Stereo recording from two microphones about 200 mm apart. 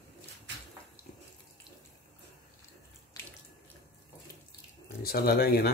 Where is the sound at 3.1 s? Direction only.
15° left (ahead or behind).